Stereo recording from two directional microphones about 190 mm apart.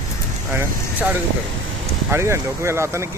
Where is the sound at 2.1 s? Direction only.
15° right (ahead or behind).